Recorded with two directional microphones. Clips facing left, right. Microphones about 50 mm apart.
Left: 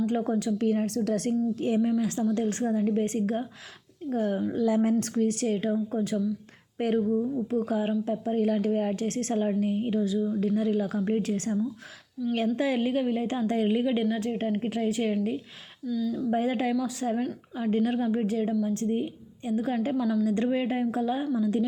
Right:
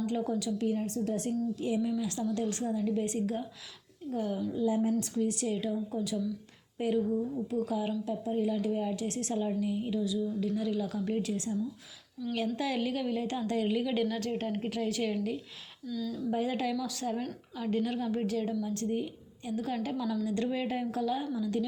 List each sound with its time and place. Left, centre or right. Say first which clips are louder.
0.0 s a woman's voice: left 5 dB; left
0.9 s a woman's voice: left 5 dB; left
1.3 s a woman's voice: left 5 dB; left
4.5 s a woman's voice: left 4 dB; left
5.1 s a woman's voice: left 5 dB; left
12.5 s a woman's voice: left 6 dB; left
15.9 s speech: left 7 dB; centre
16.1 s a woman's voice: left 3 dB; left